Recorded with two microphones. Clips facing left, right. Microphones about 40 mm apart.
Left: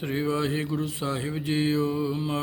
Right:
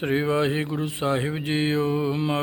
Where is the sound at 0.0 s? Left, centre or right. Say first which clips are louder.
Right 4 dB; right.